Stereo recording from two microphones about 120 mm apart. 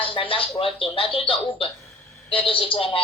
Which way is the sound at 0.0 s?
45° left (ahead or behind).